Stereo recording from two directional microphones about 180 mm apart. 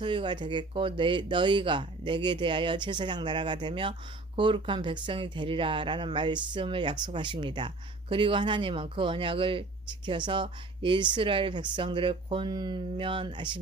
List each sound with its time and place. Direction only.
0.0 s speech: 25° right (ahead or behind)